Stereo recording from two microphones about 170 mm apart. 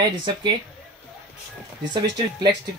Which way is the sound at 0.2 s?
25° right (ahead or behind).